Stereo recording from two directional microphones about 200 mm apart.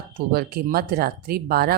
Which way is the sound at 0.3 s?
50° right (ahead or behind).